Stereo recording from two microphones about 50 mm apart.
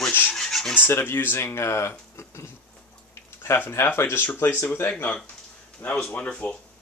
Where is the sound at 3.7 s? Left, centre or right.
Left.